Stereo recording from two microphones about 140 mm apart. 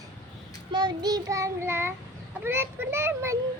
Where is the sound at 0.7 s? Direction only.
35° right (ahead or behind); by 1.9 s 15° right (ahead or behind).